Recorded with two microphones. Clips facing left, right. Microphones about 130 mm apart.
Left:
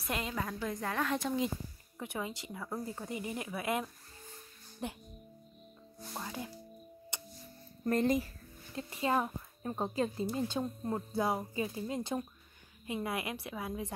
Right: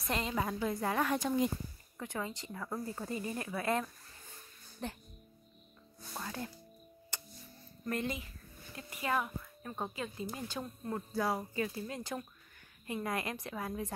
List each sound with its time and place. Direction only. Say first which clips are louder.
0.0 s a woman's voice: right 1 dB; 5° left (ahead or behind)
0.4 s a woman's voice: right 3 dB; 15° right (ahead or behind)
2.0 s a woman's voice: even; 15° left (ahead or behind)
6.1 s a woman's voice: even; 15° left (ahead or behind)
7.8 s speech: left 7 dB; 40° left (ahead or behind)
8.7 s a woman's voice: left 3 dB; 30° left (ahead or behind)